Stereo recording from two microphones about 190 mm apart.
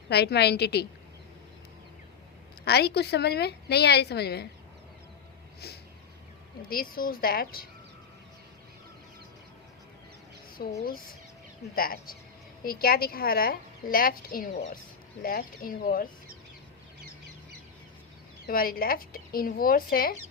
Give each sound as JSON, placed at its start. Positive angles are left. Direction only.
{"t": 0.1, "sound": "a woman's voice", "side_deg": 60}
{"t": 2.6, "sound": "a woman's voice", "side_deg": 60}
{"t": 5.6, "sound": "a sound", "side_deg": 55}
{"t": 6.6, "sound": "a woman's voice", "side_deg": 50}
{"t": 10.6, "sound": "a woman's voice", "side_deg": 50}
{"t": 18.4, "sound": "a woman's voice", "side_deg": 50}